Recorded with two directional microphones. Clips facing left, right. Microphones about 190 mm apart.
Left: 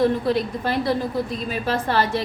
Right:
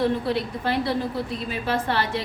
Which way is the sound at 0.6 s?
45° left (ahead or behind).